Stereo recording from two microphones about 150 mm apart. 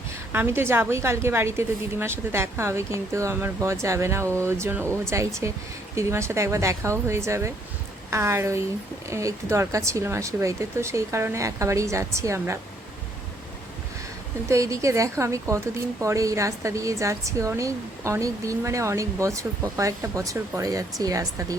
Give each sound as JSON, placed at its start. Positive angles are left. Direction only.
{"t": 0.3, "sound": "a woman's voice", "side_deg": -15}
{"t": 14.4, "sound": "a woman's voice", "side_deg": -20}